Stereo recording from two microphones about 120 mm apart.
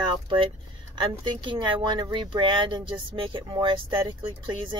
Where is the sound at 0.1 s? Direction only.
45° right (ahead or behind).